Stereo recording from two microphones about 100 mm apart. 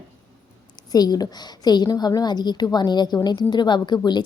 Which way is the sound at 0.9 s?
40° left (ahead or behind).